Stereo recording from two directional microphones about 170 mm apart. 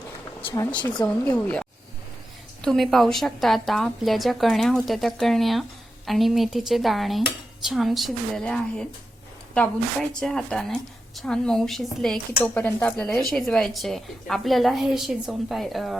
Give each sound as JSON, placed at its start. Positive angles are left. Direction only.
{"t": 0.5, "sound": "speech", "side_deg": 25}
{"t": 1.0, "sound": "a woman's voice", "side_deg": 5}